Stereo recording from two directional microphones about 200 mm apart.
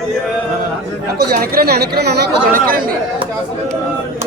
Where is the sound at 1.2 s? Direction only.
50° right (ahead or behind).